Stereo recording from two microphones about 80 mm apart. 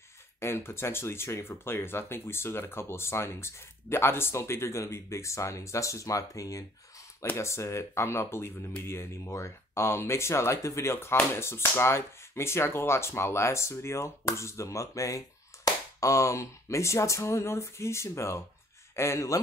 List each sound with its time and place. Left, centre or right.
0.4 s speech: left